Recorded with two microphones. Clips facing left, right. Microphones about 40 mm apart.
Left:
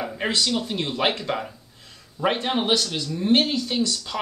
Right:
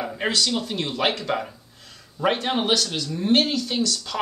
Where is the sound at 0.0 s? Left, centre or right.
Centre.